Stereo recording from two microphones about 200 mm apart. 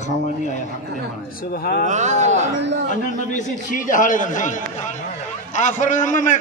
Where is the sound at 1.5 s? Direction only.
45° left (ahead or behind).